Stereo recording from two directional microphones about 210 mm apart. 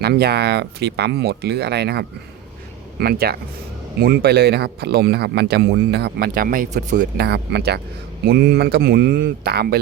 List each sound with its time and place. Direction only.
0.0 s speech: 50° right (ahead or behind)